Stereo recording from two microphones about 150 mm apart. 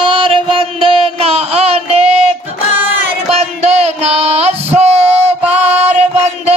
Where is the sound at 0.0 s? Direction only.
35° right (ahead or behind).